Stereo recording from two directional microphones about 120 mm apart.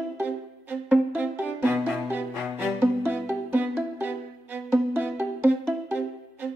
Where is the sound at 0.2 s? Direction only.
15° right (ahead or behind).